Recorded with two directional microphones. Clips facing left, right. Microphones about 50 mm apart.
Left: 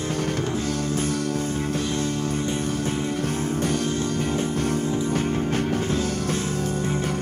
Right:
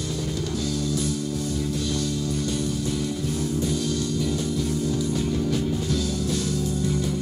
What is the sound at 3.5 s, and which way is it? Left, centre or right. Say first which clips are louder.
Music: left 1 dB; left.